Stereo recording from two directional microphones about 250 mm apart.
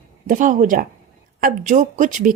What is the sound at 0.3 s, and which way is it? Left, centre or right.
A woman's voice, right.